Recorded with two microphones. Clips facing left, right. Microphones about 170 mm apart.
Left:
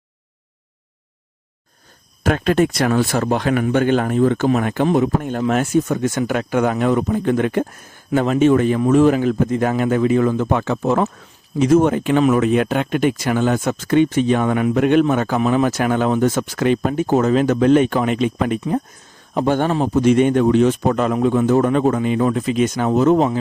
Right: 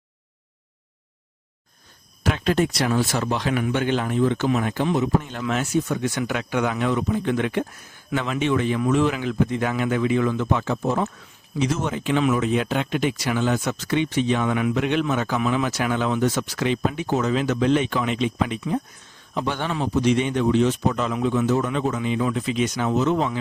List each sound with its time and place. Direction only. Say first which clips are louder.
2.2 s a man's voice: left 5 dB; 55° left (ahead or behind)
11.5 s a man's voice: left 10 dB; 50° left (ahead or behind)